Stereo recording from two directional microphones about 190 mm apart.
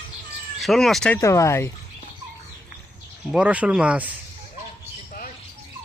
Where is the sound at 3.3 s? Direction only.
5° right (ahead or behind).